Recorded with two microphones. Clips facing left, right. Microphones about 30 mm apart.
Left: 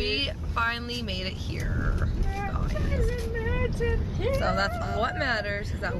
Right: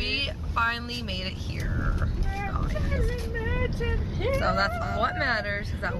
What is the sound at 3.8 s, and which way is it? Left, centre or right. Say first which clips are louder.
Speech: left 1 dB; centre.